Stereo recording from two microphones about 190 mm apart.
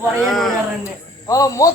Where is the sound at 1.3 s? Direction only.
15° left (ahead or behind).